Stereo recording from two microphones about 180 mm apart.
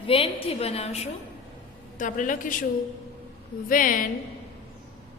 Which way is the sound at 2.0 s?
45° left (ahead or behind).